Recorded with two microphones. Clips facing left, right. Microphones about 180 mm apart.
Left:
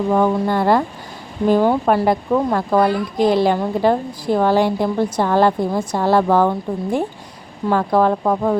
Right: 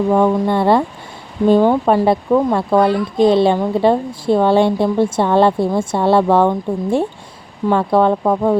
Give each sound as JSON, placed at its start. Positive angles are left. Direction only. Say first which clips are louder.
{"t": 0.1, "sound": "speech", "louder": "right 1 dB", "side_deg": -20}